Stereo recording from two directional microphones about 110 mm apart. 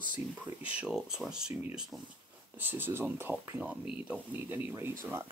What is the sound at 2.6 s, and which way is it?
Speech, 20° right (ahead or behind).